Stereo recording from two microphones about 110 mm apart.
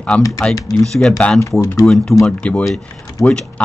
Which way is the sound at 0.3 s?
5° left (ahead or behind).